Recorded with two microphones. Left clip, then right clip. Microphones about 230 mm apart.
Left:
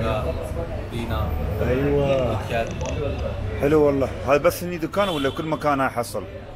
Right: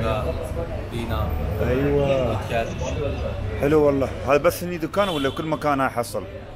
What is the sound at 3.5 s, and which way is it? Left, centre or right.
Speech, right.